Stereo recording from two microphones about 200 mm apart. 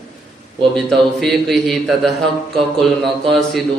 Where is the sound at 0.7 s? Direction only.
Centre (ahead or behind).